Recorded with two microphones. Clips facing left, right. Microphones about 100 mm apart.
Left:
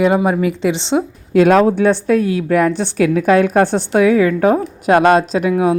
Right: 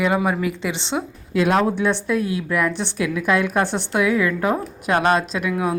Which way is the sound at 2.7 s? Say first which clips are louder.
Left 8 dB; 40° left (ahead or behind).